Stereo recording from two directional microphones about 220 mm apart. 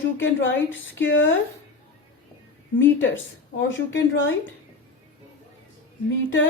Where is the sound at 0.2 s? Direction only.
60° left (ahead or behind).